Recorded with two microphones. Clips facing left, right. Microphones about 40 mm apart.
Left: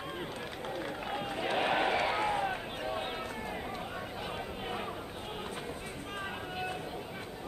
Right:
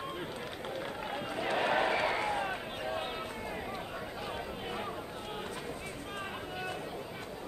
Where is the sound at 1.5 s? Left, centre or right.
Left.